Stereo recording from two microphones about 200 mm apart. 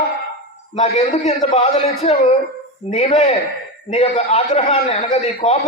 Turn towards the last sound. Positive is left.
turn(degrees=35)  # may be behind; listen again after turning